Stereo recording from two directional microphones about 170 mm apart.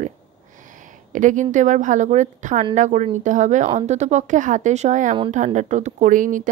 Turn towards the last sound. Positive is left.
turn(degrees=-50)  # may be behind; listen again after turning